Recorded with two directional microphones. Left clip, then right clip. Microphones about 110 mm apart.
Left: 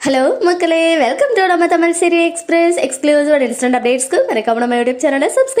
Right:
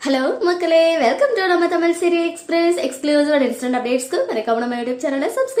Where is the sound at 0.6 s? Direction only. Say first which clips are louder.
Left 2 dB; 55° left (ahead or behind).